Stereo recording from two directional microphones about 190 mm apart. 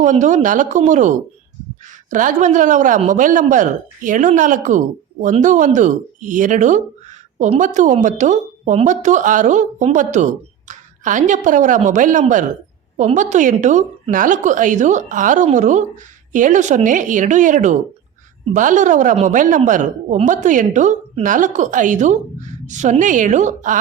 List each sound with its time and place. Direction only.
0.0 s a woman's voice: 40° right (ahead or behind)